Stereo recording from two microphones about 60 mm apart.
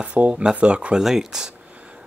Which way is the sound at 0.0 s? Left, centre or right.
Right.